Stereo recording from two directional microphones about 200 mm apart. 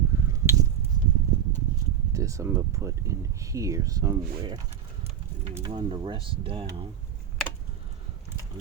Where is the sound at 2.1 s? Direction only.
15° right (ahead or behind).